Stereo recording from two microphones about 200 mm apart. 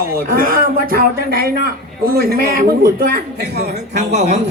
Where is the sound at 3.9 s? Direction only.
35° right (ahead or behind).